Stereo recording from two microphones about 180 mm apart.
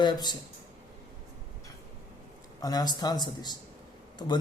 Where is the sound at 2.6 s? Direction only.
20° left (ahead or behind).